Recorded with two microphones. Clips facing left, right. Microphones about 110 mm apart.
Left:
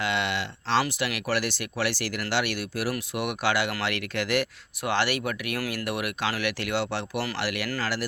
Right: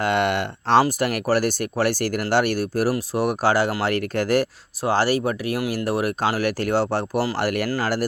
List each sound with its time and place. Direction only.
0.0 s speech: 50° right (ahead or behind)